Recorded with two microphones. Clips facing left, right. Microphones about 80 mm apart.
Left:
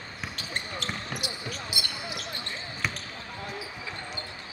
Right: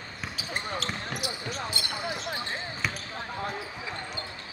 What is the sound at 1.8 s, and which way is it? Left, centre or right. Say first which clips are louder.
Basketball bounce: even; centre.